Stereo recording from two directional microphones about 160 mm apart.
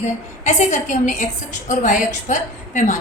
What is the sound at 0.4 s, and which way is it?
A woman's voice, 50° left (ahead or behind).